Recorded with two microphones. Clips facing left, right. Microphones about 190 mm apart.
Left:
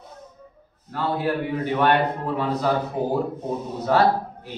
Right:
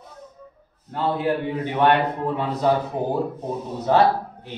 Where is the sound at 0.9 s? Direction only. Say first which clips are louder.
Right 1 dB; 20° right (ahead or behind).